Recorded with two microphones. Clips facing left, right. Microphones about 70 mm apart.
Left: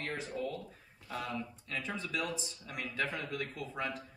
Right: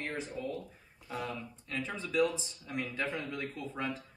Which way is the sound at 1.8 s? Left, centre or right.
Right.